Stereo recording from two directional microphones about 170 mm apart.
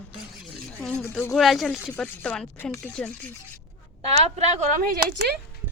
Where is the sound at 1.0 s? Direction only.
15° left (ahead or behind).